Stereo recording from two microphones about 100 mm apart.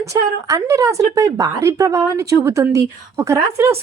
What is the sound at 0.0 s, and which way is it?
A woman's voice, 35° right (ahead or behind).